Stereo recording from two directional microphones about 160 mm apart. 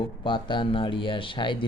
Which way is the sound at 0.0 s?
30° left (ahead or behind).